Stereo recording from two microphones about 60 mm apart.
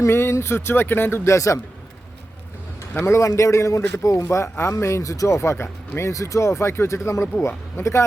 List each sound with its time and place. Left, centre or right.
0.0 s speech: left
1.2 s a man's voice: left
3.1 s a man's voice: left
6.0 s speech: left